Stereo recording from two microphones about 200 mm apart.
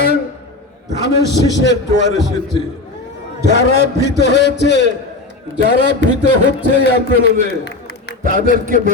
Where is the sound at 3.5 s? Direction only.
60° left (ahead or behind).